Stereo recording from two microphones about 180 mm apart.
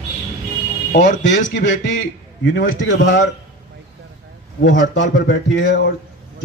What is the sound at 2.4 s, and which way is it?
Speech, 75° left (ahead or behind).